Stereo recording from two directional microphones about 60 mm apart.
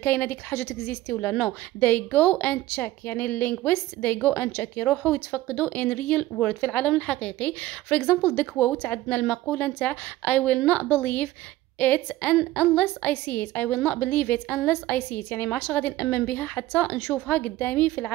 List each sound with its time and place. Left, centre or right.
0.0 s a woman's voice: left